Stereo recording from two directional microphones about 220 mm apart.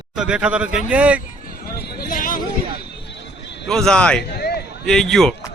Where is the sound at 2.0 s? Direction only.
40° left (ahead or behind).